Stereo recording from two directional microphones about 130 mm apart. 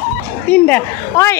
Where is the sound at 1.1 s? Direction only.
25° left (ahead or behind).